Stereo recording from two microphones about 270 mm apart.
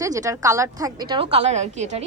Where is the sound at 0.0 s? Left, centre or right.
Centre.